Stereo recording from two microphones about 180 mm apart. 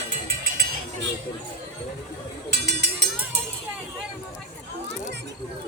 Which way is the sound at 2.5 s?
65° right (ahead or behind).